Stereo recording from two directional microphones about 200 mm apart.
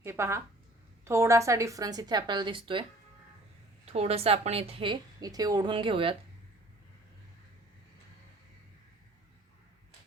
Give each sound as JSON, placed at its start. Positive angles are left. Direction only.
{"t": 0.0, "sound": "a woman's voice", "side_deg": -15}
{"t": 3.9, "sound": "a woman's voice", "side_deg": -30}